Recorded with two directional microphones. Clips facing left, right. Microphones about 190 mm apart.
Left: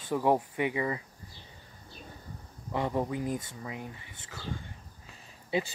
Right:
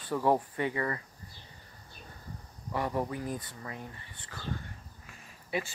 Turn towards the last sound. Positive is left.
turn(degrees=25)  # may be behind; listen again after turning